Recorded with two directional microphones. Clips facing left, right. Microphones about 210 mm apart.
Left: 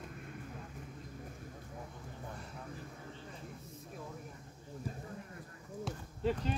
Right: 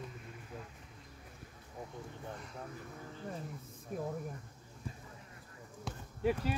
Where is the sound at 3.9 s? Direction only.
50° right (ahead or behind).